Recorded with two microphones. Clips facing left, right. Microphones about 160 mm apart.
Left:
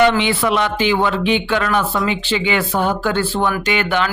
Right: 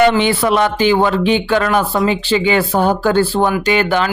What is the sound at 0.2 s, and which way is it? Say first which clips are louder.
Speech: right 4 dB; 40° right (ahead or behind).